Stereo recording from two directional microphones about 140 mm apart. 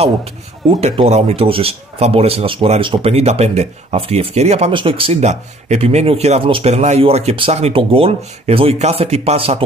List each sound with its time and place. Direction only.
0.0 s speech: 45° right (ahead or behind)
4.7 s speech: 40° right (ahead or behind)
5.2 s speech: 55° right (ahead or behind)